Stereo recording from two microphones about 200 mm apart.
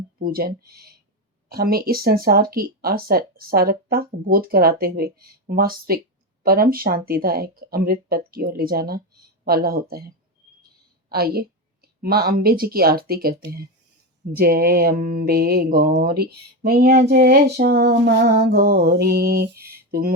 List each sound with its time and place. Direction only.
0.2 s speech: 50° right (ahead or behind)
11.1 s a woman's voice: 50° right (ahead or behind)